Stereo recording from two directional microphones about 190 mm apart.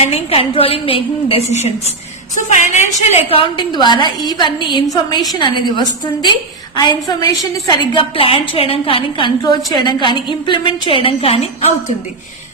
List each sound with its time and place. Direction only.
0.0 s a woman's voice: 30° left (ahead or behind)